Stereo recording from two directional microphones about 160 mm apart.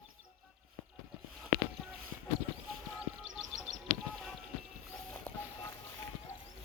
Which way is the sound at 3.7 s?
90° right.